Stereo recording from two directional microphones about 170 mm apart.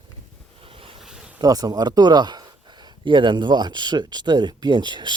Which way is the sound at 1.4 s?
20° right (ahead or behind).